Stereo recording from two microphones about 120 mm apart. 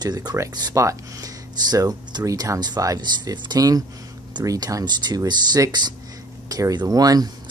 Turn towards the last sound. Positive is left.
turn(degrees=-30)  # may be behind; listen again after turning